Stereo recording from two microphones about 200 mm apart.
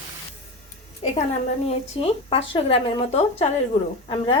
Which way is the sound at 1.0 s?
25° left (ahead or behind).